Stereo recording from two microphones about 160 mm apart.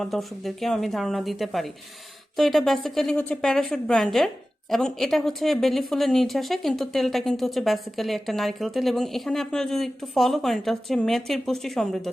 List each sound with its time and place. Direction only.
0.0 s speech: centre (ahead or behind)